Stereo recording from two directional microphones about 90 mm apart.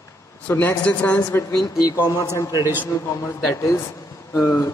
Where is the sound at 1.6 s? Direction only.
40° left (ahead or behind).